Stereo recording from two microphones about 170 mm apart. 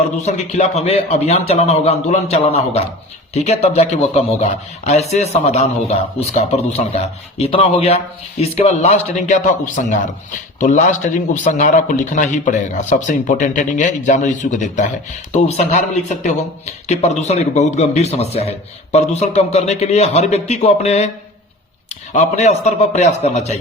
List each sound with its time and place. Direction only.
0.2 s speech: 40° left (ahead or behind)
22.1 s speech: 45° left (ahead or behind)